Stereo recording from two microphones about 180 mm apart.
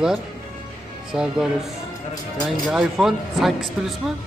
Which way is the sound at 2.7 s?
Centre (ahead or behind).